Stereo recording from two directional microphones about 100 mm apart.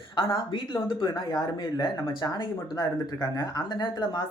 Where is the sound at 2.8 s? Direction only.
35° left (ahead or behind).